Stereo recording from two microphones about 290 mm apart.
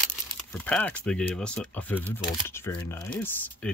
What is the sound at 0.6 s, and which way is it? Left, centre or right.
Speech, centre.